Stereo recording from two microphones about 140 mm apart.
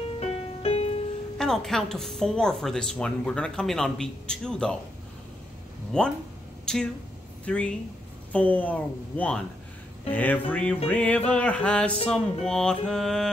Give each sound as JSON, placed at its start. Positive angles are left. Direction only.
{"t": 0.2, "sound": "music", "side_deg": 50}
{"t": 1.4, "sound": "a woman's voice", "side_deg": 5}
{"t": 5.9, "sound": "a woman's voice", "side_deg": 5}
{"t": 6.6, "sound": "a sound", "side_deg": 5}
{"t": 7.4, "sound": "a woman's voice", "side_deg": 10}